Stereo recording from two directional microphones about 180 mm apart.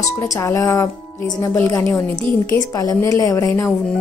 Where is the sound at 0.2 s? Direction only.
15° left (ahead or behind).